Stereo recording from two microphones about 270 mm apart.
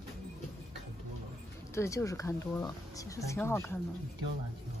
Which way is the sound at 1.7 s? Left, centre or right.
Centre.